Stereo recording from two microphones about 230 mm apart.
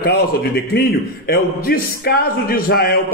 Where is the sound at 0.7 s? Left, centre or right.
Left.